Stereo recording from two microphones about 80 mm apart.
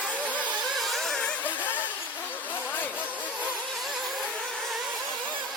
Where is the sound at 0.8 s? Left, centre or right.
Centre.